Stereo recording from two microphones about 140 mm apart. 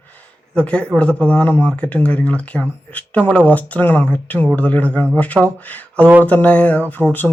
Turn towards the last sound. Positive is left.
turn(degrees=10)  # may be behind; listen again after turning